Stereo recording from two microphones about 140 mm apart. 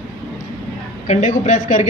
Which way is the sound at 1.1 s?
60° left (ahead or behind).